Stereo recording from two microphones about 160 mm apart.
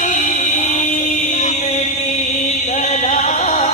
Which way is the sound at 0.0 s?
55° left (ahead or behind).